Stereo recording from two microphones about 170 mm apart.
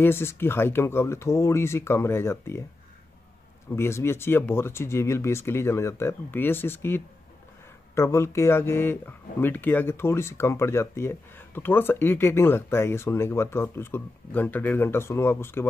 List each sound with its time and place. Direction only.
0.0 s speech: 15° left (ahead or behind)
3.7 s speech: 15° left (ahead or behind)